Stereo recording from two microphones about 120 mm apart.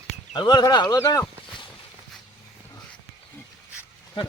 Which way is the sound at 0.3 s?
35° left (ahead or behind).